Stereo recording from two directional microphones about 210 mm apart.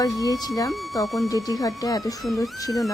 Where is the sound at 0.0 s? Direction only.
15° left (ahead or behind).